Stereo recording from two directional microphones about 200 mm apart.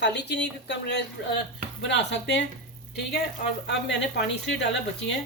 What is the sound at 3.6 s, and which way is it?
Speech, 60° left (ahead or behind).